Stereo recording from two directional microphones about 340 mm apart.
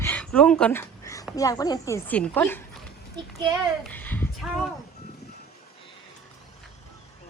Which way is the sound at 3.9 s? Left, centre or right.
Centre.